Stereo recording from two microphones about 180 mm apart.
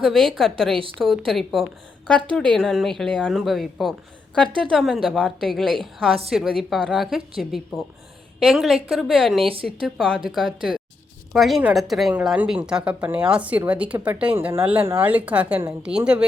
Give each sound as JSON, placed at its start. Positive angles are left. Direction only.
{"t": 0.0, "sound": "speech", "side_deg": 0}
{"t": 9.4, "sound": "speech", "side_deg": -30}
{"t": 9.8, "sound": "speech", "side_deg": 0}